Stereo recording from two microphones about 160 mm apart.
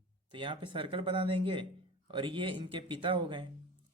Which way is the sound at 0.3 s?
30° right (ahead or behind).